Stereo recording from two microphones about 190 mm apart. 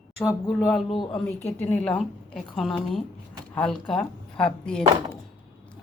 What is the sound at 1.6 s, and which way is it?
Speech, 5° left (ahead or behind).